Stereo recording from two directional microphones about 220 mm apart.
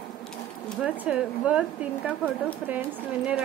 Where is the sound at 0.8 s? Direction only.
5° right (ahead or behind).